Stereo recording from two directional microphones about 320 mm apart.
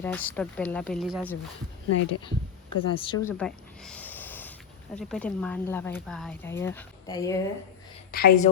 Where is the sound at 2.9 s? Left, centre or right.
Centre.